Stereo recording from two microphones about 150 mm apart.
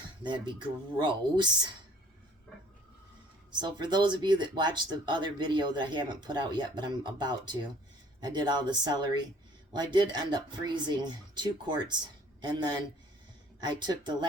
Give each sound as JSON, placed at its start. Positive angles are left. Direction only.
{"t": 0.2, "sound": "speech", "side_deg": -30}
{"t": 3.6, "sound": "speech", "side_deg": -30}